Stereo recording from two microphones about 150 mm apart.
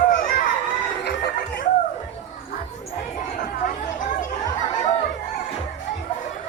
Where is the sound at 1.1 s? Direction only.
90° left.